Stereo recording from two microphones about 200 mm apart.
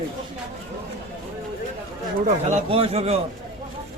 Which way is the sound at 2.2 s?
30° right (ahead or behind).